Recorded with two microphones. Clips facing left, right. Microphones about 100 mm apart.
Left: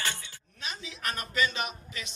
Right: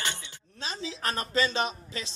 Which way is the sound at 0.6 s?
30° right (ahead or behind).